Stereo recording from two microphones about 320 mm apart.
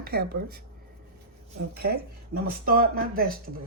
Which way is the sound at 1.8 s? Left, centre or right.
Right.